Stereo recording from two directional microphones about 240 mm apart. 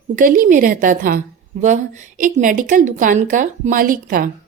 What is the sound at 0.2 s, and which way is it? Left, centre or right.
A woman's voice, right.